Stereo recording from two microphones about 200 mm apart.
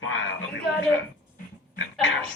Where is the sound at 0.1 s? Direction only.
70° left (ahead or behind).